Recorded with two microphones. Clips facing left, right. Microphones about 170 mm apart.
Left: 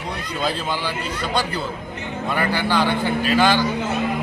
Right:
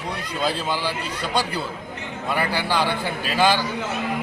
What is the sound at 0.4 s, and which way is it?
A man's voice, 10° right (ahead or behind).